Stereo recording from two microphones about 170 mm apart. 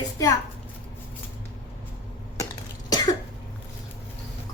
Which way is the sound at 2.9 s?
25° left (ahead or behind).